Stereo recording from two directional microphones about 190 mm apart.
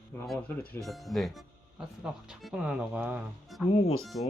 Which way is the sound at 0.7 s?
Centre (ahead or behind).